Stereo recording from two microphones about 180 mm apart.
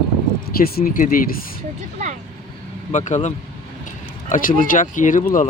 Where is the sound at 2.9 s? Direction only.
40° left (ahead or behind).